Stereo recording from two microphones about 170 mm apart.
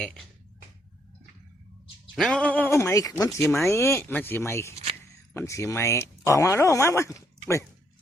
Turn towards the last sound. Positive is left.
turn(degrees=15)  # may be behind; listen again after turning